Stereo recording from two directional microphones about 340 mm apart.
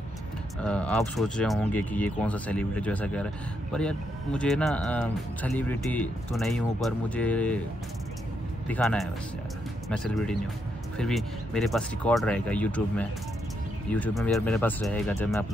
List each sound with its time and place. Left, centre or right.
0.7 s speech: centre
8.6 s speech: centre